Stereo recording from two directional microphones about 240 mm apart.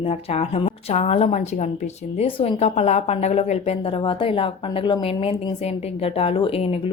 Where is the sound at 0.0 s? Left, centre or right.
Left.